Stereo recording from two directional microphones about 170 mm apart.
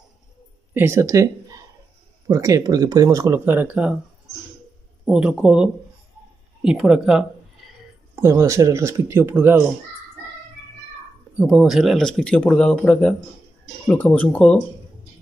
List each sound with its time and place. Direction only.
0.7 s speech: 15° right (ahead or behind)
5.0 s speech: 5° right (ahead or behind)
8.2 s speech: 15° right (ahead or behind)
11.3 s speech: 5° right (ahead or behind)